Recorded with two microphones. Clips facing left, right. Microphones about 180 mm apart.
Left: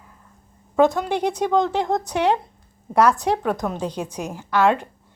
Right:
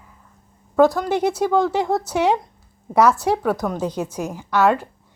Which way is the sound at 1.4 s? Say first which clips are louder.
Left 1 dB; 10° right (ahead or behind).